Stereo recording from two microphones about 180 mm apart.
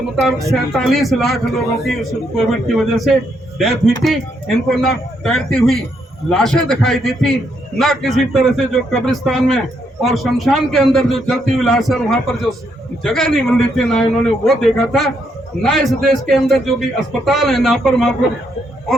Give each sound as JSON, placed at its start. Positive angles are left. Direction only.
{"t": 0.5, "sound": "a man's voice", "side_deg": 0}